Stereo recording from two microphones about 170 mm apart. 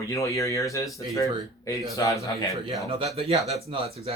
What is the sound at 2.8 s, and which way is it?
Speech, 35° right (ahead or behind).